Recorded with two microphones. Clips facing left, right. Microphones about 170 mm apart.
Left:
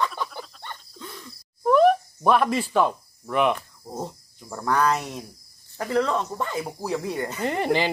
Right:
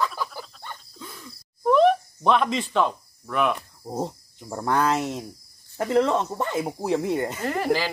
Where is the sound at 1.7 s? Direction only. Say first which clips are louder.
Left 1 dB; 5° left (ahead or behind).